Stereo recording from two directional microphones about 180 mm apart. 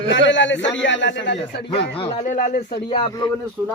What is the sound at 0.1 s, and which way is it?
A man's voice, 90° left.